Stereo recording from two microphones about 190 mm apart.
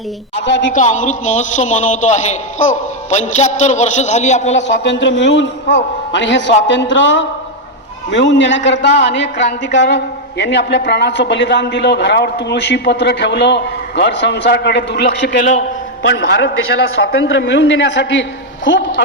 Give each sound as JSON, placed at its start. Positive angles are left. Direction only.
{"t": 0.4, "sound": "a man's voice", "side_deg": 70}
{"t": 0.7, "sound": "a man's voice", "side_deg": 40}
{"t": 4.8, "sound": "a man's voice", "side_deg": 70}
{"t": 16.0, "sound": "a man's voice", "side_deg": 80}